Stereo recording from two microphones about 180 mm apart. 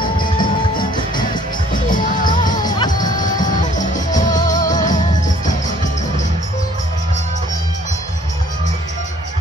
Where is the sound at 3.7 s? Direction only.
45° left (ahead or behind).